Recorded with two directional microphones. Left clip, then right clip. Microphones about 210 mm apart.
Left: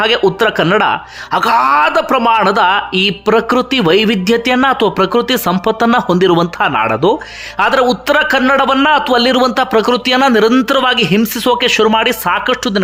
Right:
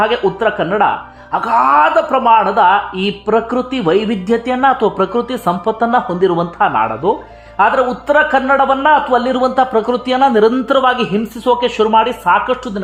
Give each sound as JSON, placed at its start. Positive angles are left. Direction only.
{"t": 0.3, "sound": "speech", "side_deg": 25}